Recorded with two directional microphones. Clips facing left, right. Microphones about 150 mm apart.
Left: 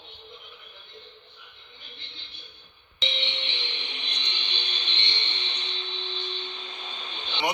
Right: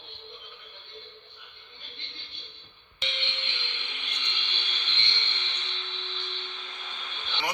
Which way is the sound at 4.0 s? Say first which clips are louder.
Left 2 dB; 20° left (ahead or behind).